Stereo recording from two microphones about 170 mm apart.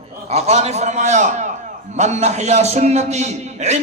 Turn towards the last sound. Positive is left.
turn(degrees=-40)  # may be behind; listen again after turning